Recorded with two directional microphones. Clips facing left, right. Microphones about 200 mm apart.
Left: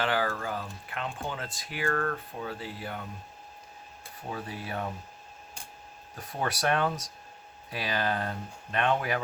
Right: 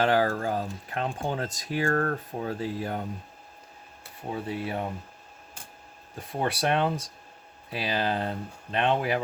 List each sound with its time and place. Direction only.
0.0 s speech: 40° right (ahead or behind)
4.3 s speech: 25° right (ahead or behind)
6.1 s speech: 25° right (ahead or behind)